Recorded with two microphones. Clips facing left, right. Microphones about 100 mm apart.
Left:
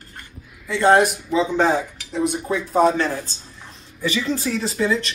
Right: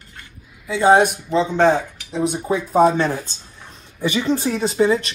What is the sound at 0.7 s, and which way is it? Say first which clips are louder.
Speech: right 2 dB; 5° right (ahead or behind).